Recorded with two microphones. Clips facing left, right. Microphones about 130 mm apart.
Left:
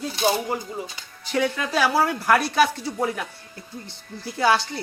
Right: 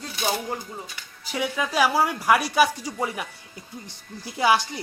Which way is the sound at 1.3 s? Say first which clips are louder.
Left 3 dB; 10° right (ahead or behind).